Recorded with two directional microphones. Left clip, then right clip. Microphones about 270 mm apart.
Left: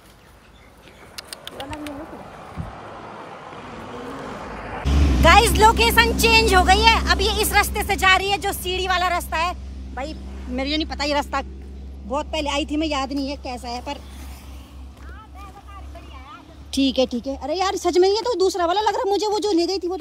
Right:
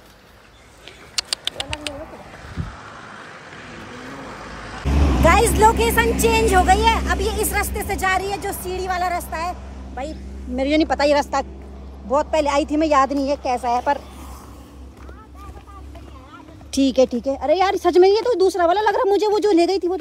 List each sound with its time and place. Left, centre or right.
1.1 s bird: centre
2.0 s vehicle: left
5.0 s vehicle: centre
5.8 s a woman's voice: centre
16.7 s speech: centre